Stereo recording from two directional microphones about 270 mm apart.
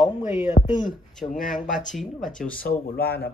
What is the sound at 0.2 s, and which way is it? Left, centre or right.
Speech, left.